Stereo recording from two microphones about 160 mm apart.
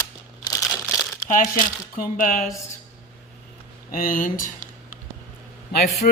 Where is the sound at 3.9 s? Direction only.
60° left (ahead or behind).